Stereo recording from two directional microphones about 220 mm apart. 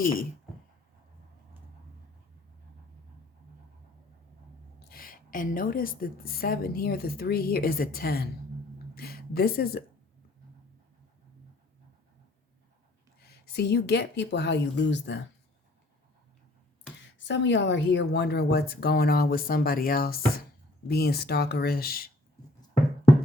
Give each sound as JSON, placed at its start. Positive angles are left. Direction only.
{"t": 0.0, "sound": "speech", "side_deg": 40}
{"t": 4.8, "sound": "a woman's voice", "side_deg": 45}
{"t": 13.2, "sound": "a woman's voice", "side_deg": 45}
{"t": 17.2, "sound": "a woman's voice", "side_deg": 55}